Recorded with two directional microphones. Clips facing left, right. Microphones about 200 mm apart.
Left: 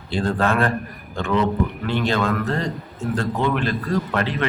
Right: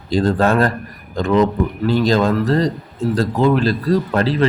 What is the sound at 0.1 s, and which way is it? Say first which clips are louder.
A man's voice: right 6 dB; 40° right (ahead or behind).